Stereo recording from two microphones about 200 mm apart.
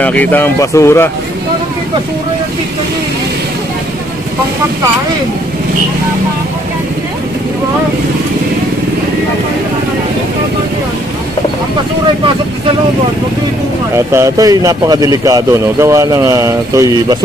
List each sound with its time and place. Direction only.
0.0 s speech: 10° left (ahead or behind)
13.9 s speech: 15° right (ahead or behind)